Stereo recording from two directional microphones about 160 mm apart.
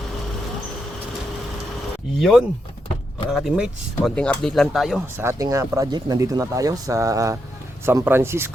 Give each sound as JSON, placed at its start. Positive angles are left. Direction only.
{"t": 2.1, "sound": "speech", "side_deg": 0}
{"t": 5.1, "sound": "speech", "side_deg": -15}